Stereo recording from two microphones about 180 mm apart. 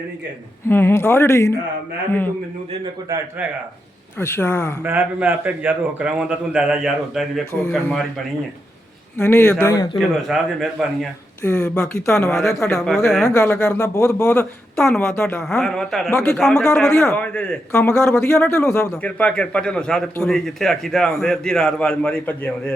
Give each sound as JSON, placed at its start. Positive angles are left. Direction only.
{"t": 0.7, "sound": "speech", "side_deg": 10}
{"t": 4.2, "sound": "speech", "side_deg": 15}
{"t": 4.8, "sound": "a man's voice", "side_deg": -10}
{"t": 9.1, "sound": "speech", "side_deg": 10}
{"t": 10.0, "sound": "a man's voice", "side_deg": 0}
{"t": 11.4, "sound": "a man's voice", "side_deg": 15}
{"t": 13.2, "sound": "speech", "side_deg": 15}
{"t": 14.8, "sound": "a man's voice", "side_deg": 5}